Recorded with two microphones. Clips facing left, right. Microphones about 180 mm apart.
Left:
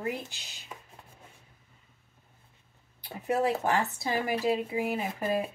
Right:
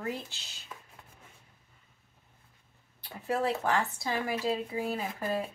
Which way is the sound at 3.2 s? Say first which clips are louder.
Left 2 dB; 20° left (ahead or behind).